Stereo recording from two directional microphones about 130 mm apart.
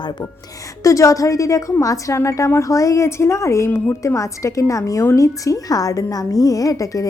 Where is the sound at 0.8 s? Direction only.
25° left (ahead or behind).